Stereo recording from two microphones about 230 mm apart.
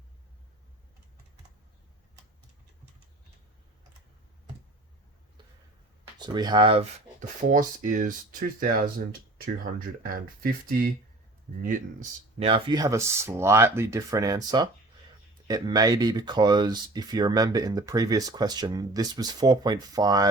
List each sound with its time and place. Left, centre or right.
6.1 s speech: centre; by 8.7 s right
10.4 s speech: right; by 20.3 s centre